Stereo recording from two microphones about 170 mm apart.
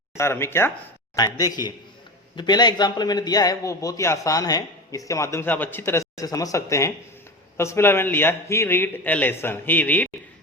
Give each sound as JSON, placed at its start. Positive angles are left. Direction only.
{"t": 0.2, "sound": "a man's voice", "side_deg": 15}